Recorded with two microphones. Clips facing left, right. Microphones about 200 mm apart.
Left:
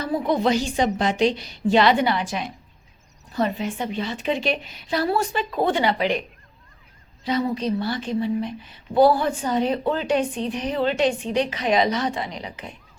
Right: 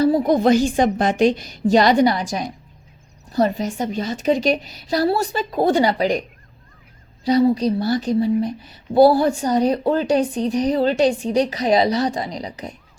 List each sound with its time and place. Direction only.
0.0 s a woman's voice: 35° right (ahead or behind)
7.3 s a woman's voice: 35° right (ahead or behind)